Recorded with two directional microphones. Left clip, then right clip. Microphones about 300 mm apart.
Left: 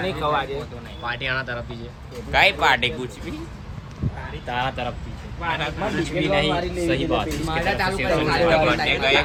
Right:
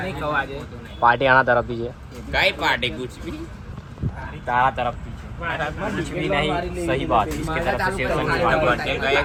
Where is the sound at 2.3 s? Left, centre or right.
Centre.